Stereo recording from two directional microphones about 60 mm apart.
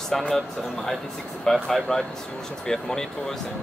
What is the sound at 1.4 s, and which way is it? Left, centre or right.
Speech, centre.